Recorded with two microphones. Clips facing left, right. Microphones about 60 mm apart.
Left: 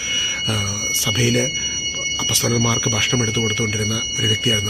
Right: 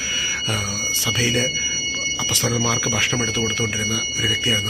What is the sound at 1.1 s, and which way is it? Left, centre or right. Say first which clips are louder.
Speech: left 2 dB; right.